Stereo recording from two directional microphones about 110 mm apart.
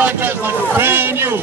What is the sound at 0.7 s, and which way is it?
Speech, 20° right (ahead or behind).